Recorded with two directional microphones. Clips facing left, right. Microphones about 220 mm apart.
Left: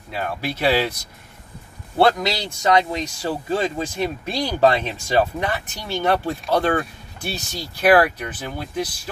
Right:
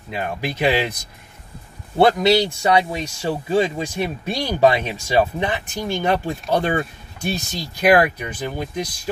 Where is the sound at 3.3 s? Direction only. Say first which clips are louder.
Right 4 dB; 10° right (ahead or behind).